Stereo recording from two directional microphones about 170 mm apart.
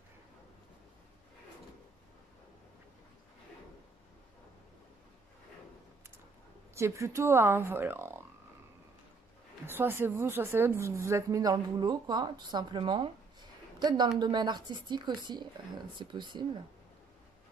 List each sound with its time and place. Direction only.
6.7 s speech: 15° right (ahead or behind)
9.7 s a woman's voice: 15° right (ahead or behind)